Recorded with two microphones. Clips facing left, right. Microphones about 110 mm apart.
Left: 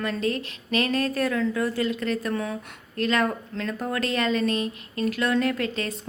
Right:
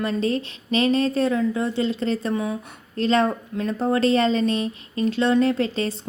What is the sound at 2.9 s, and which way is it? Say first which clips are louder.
A woman's voice: right 4 dB; 30° right (ahead or behind).